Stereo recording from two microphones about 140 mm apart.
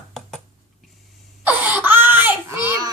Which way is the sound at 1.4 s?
10° right (ahead or behind).